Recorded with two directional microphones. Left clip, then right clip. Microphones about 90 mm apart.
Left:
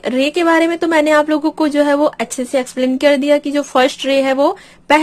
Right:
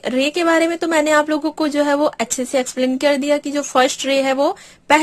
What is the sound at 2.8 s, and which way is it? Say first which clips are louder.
Speech: left 5 dB; 30° right (ahead or behind).